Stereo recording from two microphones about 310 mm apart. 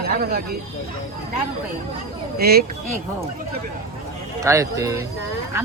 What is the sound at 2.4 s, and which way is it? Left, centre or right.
Speech, right.